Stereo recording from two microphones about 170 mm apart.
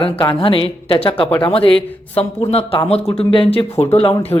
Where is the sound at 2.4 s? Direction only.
35° left (ahead or behind).